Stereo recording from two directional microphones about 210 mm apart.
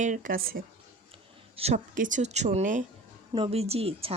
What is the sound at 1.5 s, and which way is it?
A woman's voice, 30° right (ahead or behind).